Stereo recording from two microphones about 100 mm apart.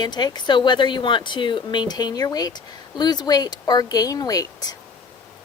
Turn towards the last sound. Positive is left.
turn(degrees=40)  # may be behind; listen again after turning